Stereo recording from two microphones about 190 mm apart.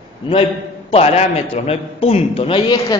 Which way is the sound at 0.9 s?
35° left (ahead or behind).